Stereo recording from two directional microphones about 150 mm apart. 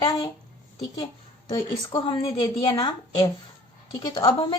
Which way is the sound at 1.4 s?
30° left (ahead or behind).